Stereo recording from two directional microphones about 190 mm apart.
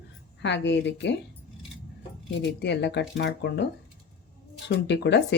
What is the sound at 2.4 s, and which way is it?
Speech, 65° left (ahead or behind).